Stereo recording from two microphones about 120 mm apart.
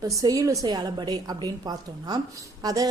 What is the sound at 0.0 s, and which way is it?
Speech, 30° right (ahead or behind).